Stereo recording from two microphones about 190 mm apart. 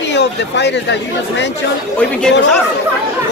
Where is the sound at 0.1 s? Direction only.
65° left (ahead or behind).